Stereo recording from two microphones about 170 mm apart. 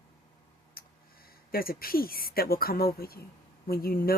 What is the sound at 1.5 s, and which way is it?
Speech, 60° left (ahead or behind).